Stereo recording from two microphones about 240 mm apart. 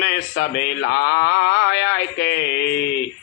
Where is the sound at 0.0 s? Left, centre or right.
Left.